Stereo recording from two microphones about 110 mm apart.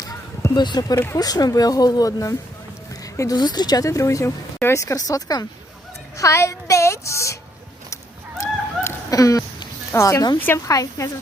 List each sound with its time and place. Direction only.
0.0 s a sound: 35° left (ahead or behind)
0.9 s a woman's voice: 20° left (ahead or behind)
1.2 s a woman's voice: 35° left (ahead or behind)
8.4 s a sound: 30° left (ahead or behind)
10.3 s speech: 20° left (ahead or behind)
10.7 s a woman's voice: 30° left (ahead or behind)